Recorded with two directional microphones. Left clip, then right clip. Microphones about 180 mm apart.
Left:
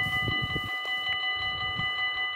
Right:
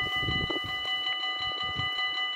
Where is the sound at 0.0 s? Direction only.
15° right (ahead or behind).